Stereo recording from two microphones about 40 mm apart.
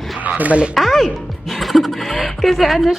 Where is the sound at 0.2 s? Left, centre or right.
Right.